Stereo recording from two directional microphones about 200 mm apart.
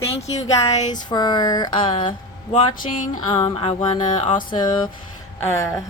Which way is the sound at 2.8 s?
40° left (ahead or behind).